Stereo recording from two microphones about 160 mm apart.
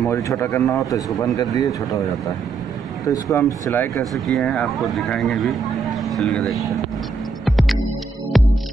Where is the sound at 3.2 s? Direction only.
20° left (ahead or behind).